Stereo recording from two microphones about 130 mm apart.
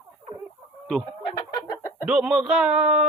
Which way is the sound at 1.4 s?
25° left (ahead or behind).